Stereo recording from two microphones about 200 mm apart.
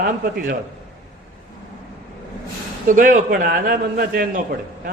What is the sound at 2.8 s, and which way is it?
A man's voice, 40° right (ahead or behind).